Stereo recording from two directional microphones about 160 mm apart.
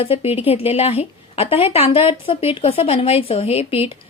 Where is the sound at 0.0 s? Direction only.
35° left (ahead or behind).